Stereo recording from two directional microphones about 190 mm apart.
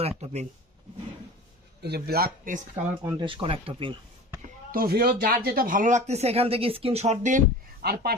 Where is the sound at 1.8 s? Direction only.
55° right (ahead or behind).